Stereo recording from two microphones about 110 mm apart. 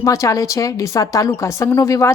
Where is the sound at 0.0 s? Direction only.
30° left (ahead or behind).